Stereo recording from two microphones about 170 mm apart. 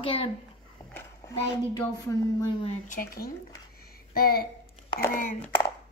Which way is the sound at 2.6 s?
50° left (ahead or behind).